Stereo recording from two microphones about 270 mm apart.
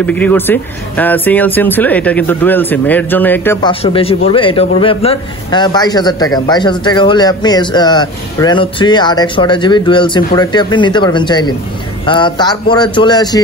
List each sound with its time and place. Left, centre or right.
0.0 s a man's voice: centre
3.8 s a man's voice: left